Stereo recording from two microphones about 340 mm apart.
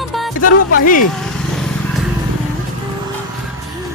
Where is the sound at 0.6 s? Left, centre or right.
Left.